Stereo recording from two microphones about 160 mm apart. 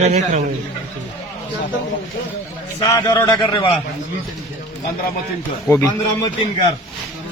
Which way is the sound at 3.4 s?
30° left (ahead or behind).